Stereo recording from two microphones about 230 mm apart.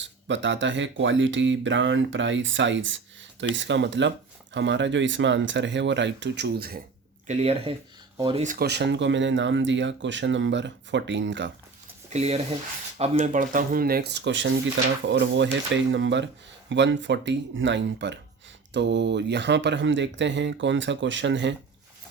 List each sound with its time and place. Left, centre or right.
0.0 s speech: right
7.3 s speech: right
8.5 s speech: right
12.1 s speech: right